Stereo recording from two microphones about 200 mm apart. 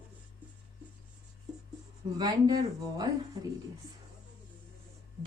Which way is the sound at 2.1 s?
20° right (ahead or behind).